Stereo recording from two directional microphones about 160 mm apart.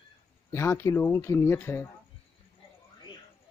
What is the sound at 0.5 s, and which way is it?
Speech, 15° left (ahead or behind).